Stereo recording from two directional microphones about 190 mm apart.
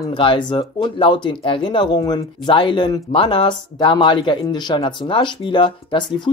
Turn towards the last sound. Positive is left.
turn(degrees=25)  # may be behind; listen again after turning